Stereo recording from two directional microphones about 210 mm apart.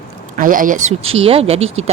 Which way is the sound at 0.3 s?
40° right (ahead or behind).